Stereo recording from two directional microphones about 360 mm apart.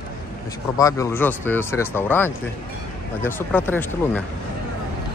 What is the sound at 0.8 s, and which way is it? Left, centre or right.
Speech, centre.